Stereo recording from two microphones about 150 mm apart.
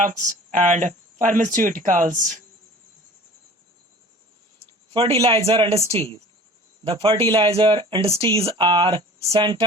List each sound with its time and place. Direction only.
0.0 s speech: 55° right (ahead or behind)
4.9 s a man's voice: 40° right (ahead or behind)
6.8 s a man's voice: 35° right (ahead or behind)